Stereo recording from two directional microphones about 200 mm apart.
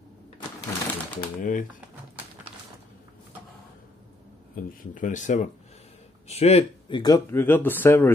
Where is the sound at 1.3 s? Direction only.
45° left (ahead or behind).